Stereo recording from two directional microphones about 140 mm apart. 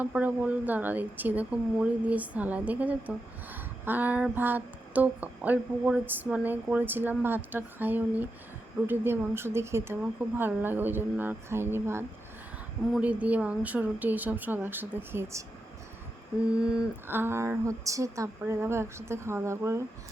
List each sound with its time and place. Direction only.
0.0 s speech: 10° right (ahead or behind)
16.6 s speech: 5° right (ahead or behind)